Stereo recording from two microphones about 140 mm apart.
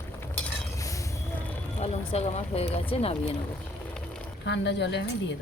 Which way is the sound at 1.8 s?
50° left (ahead or behind).